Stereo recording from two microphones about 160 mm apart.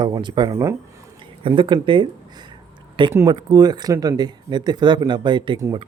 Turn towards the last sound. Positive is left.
turn(degrees=-25)  # may be behind; listen again after turning